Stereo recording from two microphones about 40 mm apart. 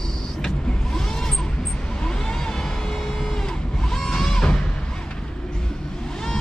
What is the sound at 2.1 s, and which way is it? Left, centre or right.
Vehicle, centre.